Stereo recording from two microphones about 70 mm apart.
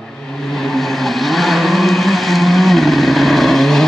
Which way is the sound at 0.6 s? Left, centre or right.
Centre.